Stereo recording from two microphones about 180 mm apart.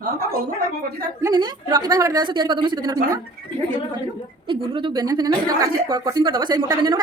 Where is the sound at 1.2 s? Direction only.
25° right (ahead or behind).